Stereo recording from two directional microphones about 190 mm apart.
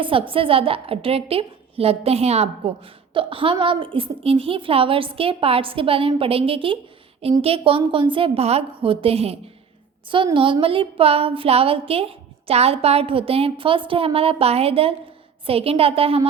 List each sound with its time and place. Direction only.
0.0 s a woman's voice: 30° right (ahead or behind)